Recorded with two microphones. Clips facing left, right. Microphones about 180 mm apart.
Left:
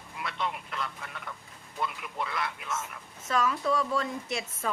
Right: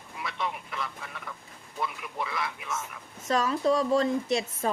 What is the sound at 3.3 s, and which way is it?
Speech, 35° right (ahead or behind).